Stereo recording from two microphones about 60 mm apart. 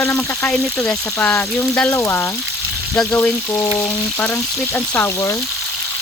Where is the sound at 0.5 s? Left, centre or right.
Left.